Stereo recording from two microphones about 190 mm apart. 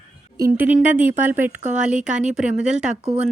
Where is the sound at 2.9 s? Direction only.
35° right (ahead or behind).